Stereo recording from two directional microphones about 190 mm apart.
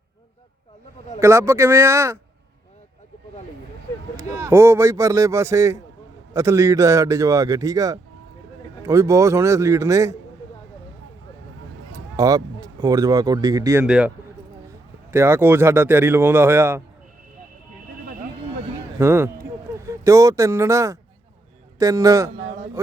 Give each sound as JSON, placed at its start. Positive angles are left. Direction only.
{"t": 1.2, "sound": "speech", "side_deg": -15}
{"t": 4.4, "sound": "speech", "side_deg": -15}
{"t": 12.1, "sound": "speech", "side_deg": -20}
{"t": 13.8, "sound": "a man's voice", "side_deg": -5}
{"t": 15.1, "sound": "speech", "side_deg": -15}
{"t": 18.9, "sound": "speech", "side_deg": -15}